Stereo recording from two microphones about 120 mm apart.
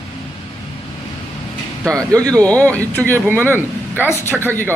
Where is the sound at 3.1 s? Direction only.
20° right (ahead or behind).